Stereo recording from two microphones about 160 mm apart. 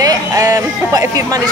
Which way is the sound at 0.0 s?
20° right (ahead or behind).